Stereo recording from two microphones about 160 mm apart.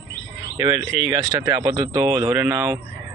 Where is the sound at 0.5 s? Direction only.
25° right (ahead or behind).